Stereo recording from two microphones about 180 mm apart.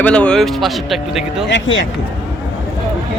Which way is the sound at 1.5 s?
85° left.